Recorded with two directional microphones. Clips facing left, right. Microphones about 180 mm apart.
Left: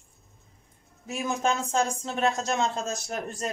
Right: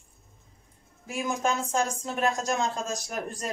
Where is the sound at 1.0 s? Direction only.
25° left (ahead or behind).